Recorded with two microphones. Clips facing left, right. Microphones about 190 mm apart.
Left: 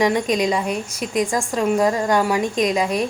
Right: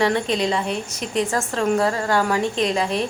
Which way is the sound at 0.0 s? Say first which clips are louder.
Left 2 dB; 15° left (ahead or behind).